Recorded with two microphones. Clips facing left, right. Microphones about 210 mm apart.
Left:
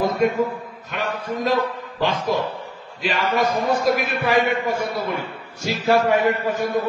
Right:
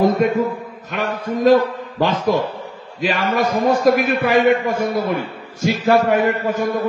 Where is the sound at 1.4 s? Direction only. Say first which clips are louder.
Right 9 dB; 45° right (ahead or behind).